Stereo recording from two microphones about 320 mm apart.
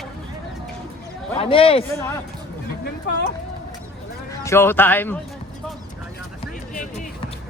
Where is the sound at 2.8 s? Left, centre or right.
Left.